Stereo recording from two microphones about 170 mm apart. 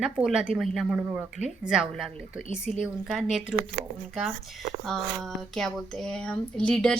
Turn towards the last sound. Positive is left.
turn(degrees=5)  # may be behind; listen again after turning